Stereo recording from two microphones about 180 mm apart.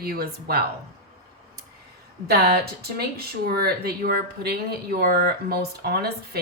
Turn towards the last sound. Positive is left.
turn(degrees=-60)  # may be behind; listen again after turning